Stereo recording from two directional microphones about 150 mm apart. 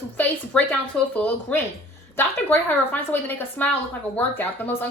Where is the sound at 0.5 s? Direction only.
5° left (ahead or behind).